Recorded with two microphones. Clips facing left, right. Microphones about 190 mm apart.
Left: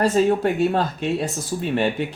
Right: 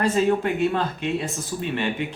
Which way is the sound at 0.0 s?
40° left (ahead or behind).